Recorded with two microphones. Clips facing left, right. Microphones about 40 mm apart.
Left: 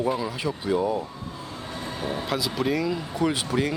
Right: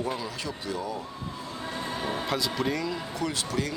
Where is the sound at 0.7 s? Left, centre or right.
Left.